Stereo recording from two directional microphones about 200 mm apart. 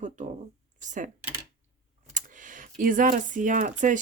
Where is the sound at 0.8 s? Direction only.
40° right (ahead or behind).